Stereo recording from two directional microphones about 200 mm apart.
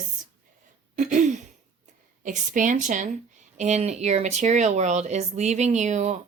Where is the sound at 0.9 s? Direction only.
40° right (ahead or behind).